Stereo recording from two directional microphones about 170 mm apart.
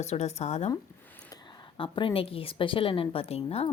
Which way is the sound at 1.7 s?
30° left (ahead or behind).